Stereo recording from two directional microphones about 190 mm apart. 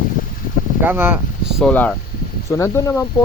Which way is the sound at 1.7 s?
10° left (ahead or behind).